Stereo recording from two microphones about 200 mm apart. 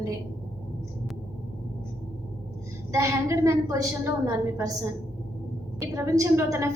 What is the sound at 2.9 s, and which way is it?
A woman's voice, 15° right (ahead or behind).